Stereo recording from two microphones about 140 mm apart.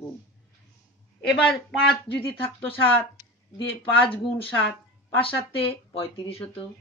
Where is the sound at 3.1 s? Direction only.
35° left (ahead or behind).